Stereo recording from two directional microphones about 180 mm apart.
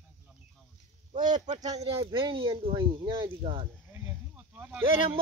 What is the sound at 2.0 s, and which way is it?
Speech, 30° right (ahead or behind).